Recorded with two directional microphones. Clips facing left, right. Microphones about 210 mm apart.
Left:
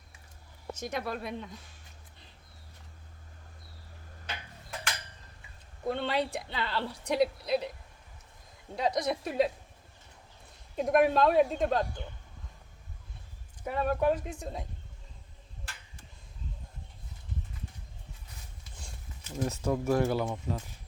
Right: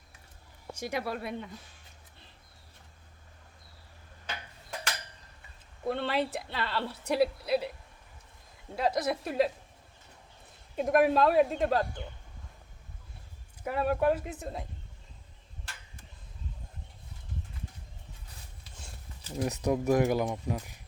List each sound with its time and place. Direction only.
0.7 s speech: 10° right (ahead or behind)
5.8 s a woman's voice: centre (ahead or behind)
8.7 s a woman's voice: 5° right (ahead or behind)
10.8 s a woman's voice: centre (ahead or behind)
13.7 s a woman's voice: 5° right (ahead or behind)
19.4 s speech: 15° right (ahead or behind)